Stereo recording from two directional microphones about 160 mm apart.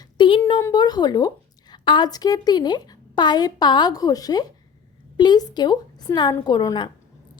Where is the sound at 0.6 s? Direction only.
25° left (ahead or behind).